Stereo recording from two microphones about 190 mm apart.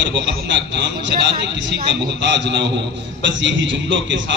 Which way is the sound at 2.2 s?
70° right (ahead or behind).